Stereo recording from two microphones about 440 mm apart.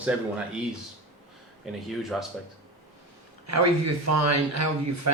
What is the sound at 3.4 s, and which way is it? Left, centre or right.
Speech, right.